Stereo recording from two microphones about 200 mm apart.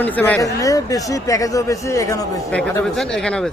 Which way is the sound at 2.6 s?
5° left (ahead or behind).